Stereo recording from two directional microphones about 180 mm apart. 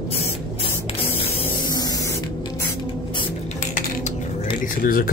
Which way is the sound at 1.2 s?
20° left (ahead or behind).